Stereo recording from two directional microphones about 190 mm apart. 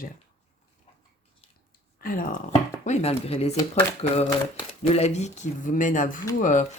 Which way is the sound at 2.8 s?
35° left (ahead or behind).